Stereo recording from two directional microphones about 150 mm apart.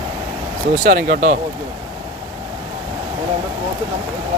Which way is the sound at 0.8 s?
60° right (ahead or behind).